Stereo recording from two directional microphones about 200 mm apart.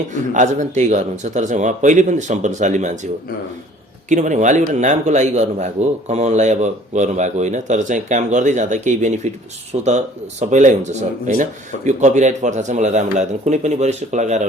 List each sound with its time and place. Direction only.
0.1 s a man's voice: 35° right (ahead or behind)
4.1 s a man's voice: 40° right (ahead or behind)